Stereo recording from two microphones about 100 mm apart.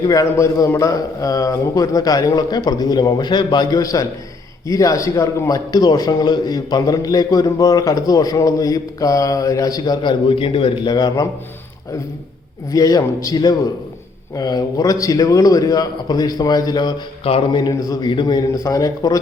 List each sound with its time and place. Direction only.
0.0 s a man's voice: 35° left (ahead or behind); by 10.9 s 60° left (ahead or behind)
10.9 s a man's voice: 40° left (ahead or behind)
12.7 s a man's voice: 35° left (ahead or behind)
18.1 s a man's voice: 50° left (ahead or behind)
18.5 s a man's voice: 35° left (ahead or behind)